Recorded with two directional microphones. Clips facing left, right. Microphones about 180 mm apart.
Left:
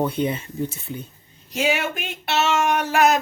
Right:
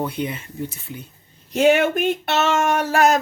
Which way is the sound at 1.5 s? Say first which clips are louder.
Right 7 dB; 55° right (ahead or behind).